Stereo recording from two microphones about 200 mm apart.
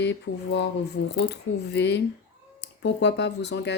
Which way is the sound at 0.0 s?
60° left (ahead or behind).